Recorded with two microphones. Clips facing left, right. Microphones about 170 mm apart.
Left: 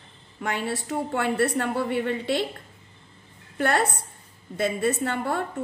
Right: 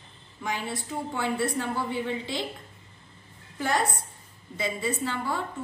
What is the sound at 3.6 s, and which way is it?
A woman's voice, 65° left (ahead or behind).